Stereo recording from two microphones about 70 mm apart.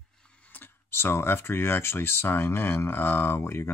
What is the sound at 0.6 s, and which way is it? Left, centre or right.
Speech, left.